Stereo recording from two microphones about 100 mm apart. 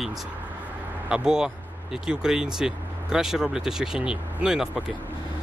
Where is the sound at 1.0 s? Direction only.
5° right (ahead or behind).